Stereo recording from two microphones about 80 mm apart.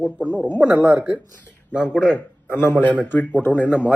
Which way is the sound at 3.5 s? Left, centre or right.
Centre.